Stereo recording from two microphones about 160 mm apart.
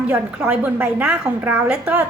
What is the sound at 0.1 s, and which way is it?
A woman's voice, 10° right (ahead or behind).